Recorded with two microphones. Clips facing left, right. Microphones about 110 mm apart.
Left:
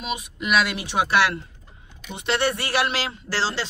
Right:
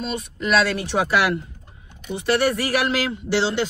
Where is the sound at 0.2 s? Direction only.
15° left (ahead or behind).